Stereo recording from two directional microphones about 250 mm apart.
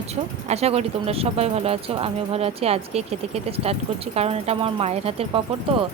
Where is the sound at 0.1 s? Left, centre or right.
Right.